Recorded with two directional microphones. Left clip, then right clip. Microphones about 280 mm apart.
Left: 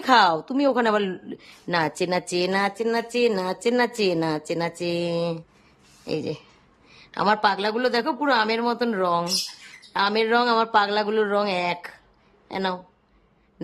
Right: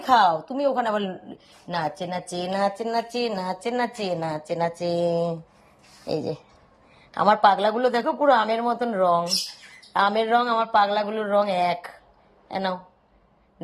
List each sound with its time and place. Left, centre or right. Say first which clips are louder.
0.0 s speech: left 1 dB; centre
5.1 s speech: right 1 dB; left
6.1 s speech: right 1 dB; centre